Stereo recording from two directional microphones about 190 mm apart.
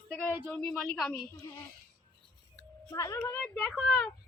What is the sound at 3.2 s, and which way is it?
Speech, 5° left (ahead or behind).